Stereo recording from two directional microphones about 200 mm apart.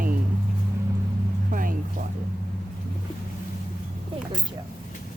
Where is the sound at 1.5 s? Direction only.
45° right (ahead or behind).